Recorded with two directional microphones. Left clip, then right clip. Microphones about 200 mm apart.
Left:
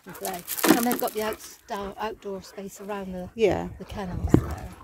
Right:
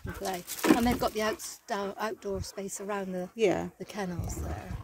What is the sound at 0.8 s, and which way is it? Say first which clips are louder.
Speech: left 2 dB; 40° right (ahead or behind).